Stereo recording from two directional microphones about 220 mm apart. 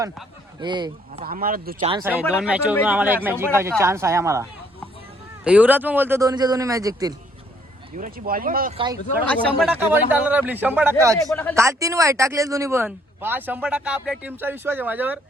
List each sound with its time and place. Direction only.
0.0 s speech: 5° right (ahead or behind)
0.6 s speech: 20° right (ahead or behind)
1.2 s speech: 40° right (ahead or behind)
2.4 s speech: 5° right (ahead or behind)
5.5 s speech: 5° right (ahead or behind)
7.9 s speech: 40° right (ahead or behind)
8.7 s speech: 20° right (ahead or behind)
9.6 s speech: centre (ahead or behind)
11.3 s speech: 5° left (ahead or behind)
11.5 s speech: 15° right (ahead or behind)